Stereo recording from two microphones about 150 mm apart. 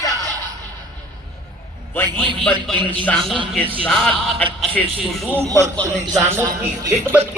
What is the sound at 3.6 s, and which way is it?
Speech, 35° right (ahead or behind).